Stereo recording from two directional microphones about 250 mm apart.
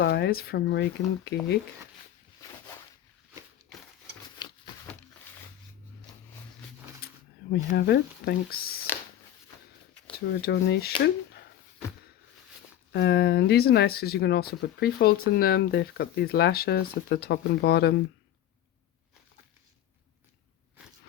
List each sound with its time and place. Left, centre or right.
0.0 s speech: left
4.4 s a sound: centre
7.5 s speech: left
10.3 s speech: left
12.9 s speech: left